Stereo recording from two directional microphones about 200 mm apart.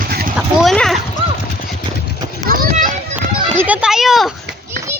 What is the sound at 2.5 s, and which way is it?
Children playing, 45° right (ahead or behind).